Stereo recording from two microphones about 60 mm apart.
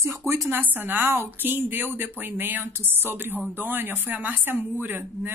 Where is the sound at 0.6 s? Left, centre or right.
Right.